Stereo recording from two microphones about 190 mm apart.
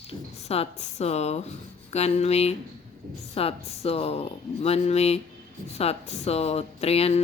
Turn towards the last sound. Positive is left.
turn(degrees=30)  # may be behind; listen again after turning